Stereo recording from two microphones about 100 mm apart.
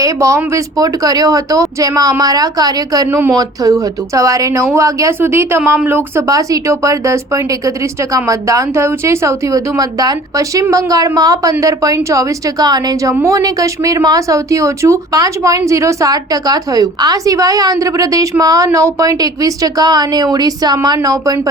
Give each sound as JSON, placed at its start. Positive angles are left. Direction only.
{"t": 0.0, "sound": "a woman's voice", "side_deg": -30}
{"t": 3.1, "sound": "speech", "side_deg": -20}
{"t": 3.3, "sound": "a woman's voice", "side_deg": -35}
{"t": 6.2, "sound": "a woman's voice", "side_deg": -35}